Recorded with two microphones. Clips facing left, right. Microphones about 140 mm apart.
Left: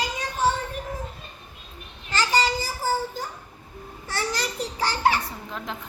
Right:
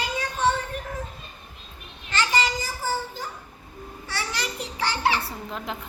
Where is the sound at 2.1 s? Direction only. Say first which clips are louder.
Left 1 dB; 40° left (ahead or behind).